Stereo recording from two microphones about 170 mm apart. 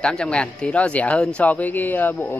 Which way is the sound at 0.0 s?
5° left (ahead or behind).